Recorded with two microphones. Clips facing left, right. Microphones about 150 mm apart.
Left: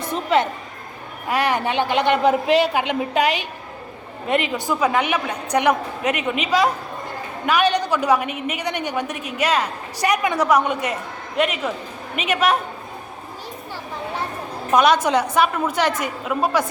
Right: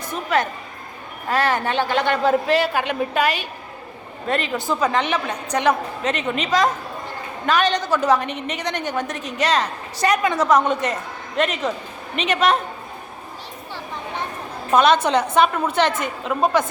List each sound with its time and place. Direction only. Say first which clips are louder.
0.0 s a woman's voice: left 2 dB; 25° left (ahead or behind)
14.7 s a woman's voice: even; 10° left (ahead or behind)